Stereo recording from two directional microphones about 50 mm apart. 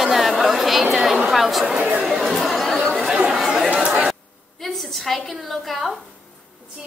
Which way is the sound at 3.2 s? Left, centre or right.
Centre.